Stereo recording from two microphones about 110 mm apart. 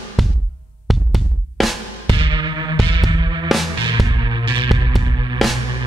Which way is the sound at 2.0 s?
45° right (ahead or behind).